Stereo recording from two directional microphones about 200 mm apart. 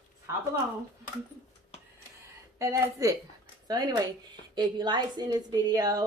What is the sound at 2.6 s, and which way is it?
Speech, 15° right (ahead or behind).